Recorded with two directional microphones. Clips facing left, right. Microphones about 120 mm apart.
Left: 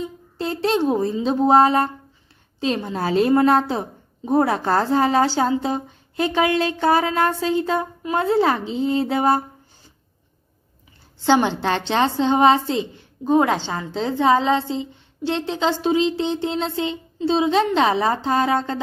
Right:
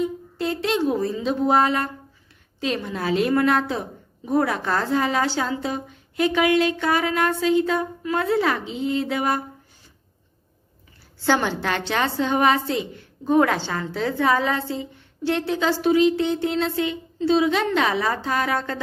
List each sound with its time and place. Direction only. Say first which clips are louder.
0.0 s a woman's voice: right 3 dB; 30° left (ahead or behind)
11.2 s a woman's voice: left 4 dB; 20° left (ahead or behind)